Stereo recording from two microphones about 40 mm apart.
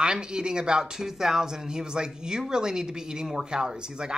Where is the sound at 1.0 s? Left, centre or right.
Centre.